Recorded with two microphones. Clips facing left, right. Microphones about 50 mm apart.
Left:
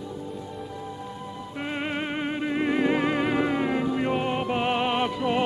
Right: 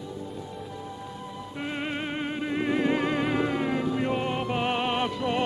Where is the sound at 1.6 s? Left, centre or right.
Centre.